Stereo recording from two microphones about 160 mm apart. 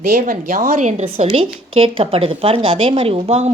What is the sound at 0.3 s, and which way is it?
A woman's voice, 60° right (ahead or behind).